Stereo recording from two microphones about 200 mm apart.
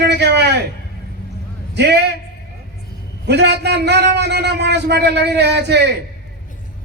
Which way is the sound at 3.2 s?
60° right (ahead or behind).